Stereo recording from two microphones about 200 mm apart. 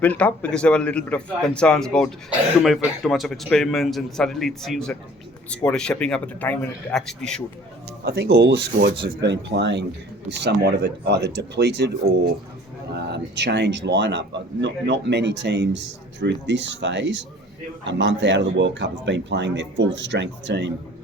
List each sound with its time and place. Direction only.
0.0 s a man's voice: 10° left (ahead or behind)
8.0 s speech: 50° right (ahead or behind)